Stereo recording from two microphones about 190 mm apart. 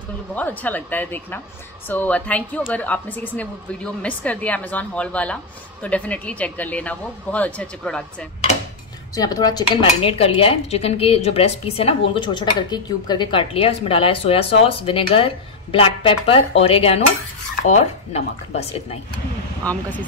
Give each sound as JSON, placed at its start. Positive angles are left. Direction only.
{"t": 0.3, "sound": "a woman's voice", "side_deg": 10}
{"t": 9.1, "sound": "dishes", "side_deg": 20}
{"t": 17.6, "sound": "speech", "side_deg": 35}
{"t": 19.6, "sound": "a woman's voice", "side_deg": 10}